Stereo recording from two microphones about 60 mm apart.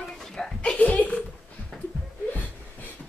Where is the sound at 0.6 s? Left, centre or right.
Left.